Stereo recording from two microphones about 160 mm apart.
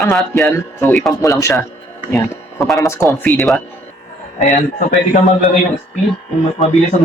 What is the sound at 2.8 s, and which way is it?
Speech, 20° left (ahead or behind).